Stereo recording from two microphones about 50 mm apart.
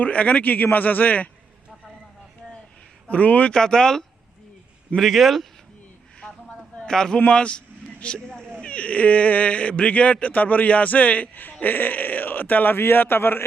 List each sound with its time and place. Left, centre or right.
0.0 s a man's voice: left
3.1 s speech: left
3.5 s a man's voice: centre
6.1 s a sound: centre
7.3 s a man's voice: left